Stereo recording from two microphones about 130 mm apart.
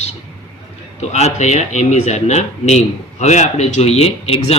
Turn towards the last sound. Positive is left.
turn(degrees=50)  # may be behind; listen again after turning